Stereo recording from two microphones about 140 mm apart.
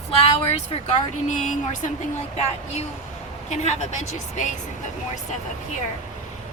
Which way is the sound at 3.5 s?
50° left (ahead or behind).